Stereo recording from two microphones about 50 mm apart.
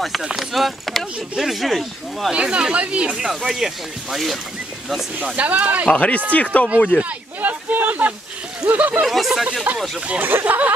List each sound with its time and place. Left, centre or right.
0.0 s speech: centre
2.3 s speech: centre
3.3 s speech: centre
5.4 s speech: right
5.9 s speech: left
7.0 s a sound: right
8.7 s speech: right
9.0 s speech: centre
10.4 s speech: right